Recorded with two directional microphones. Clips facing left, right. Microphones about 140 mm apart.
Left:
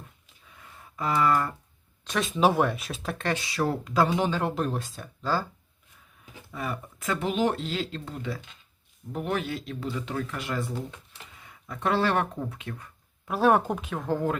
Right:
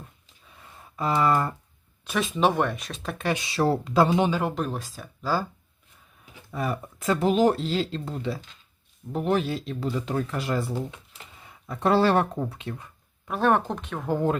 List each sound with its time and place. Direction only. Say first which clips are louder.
0.9 s speech: right 2 dB; 25° right (ahead or behind)
2.0 s speech: even; centre (ahead or behind)
3.3 s speech: right 7 dB; 25° right (ahead or behind)
4.3 s speech: right 1 dB; centre (ahead or behind)
6.5 s speech: right 4 dB; 35° right (ahead or behind)
13.2 s speech: left 1 dB; 5° left (ahead or behind)
14.1 s speech: right 3 dB; 20° right (ahead or behind)